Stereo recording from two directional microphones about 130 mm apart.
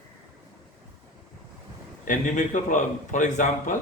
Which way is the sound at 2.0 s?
85° left.